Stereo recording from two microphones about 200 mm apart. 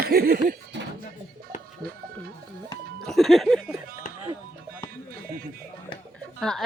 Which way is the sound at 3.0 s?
Centre (ahead or behind).